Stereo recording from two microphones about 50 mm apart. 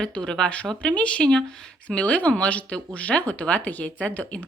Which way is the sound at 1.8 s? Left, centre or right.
Left.